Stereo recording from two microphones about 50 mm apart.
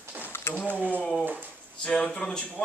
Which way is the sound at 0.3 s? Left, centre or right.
Left.